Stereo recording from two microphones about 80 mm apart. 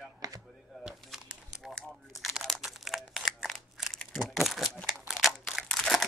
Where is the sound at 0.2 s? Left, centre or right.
Right.